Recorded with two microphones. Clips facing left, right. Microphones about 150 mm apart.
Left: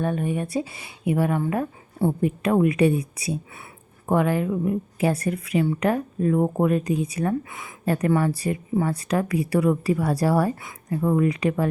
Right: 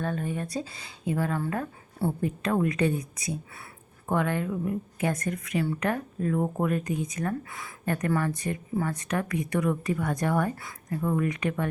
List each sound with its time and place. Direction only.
0.0 s speech: 20° left (ahead or behind)
3.2 s a woman's voice: 25° left (ahead or behind)